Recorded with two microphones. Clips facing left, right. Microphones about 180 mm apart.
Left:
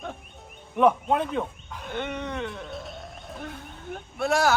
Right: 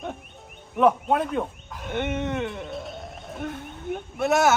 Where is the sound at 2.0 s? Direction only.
20° right (ahead or behind).